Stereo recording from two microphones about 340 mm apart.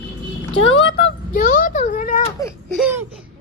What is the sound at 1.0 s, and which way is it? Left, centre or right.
Speech, left.